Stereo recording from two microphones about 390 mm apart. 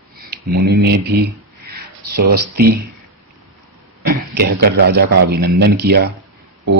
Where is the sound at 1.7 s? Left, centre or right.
Right.